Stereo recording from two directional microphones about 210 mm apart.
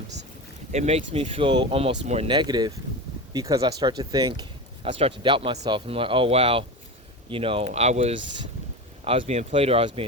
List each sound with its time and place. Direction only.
0.7 s speech: 30° right (ahead or behind)